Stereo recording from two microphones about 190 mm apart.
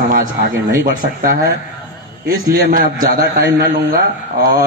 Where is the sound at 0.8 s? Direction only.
45° right (ahead or behind).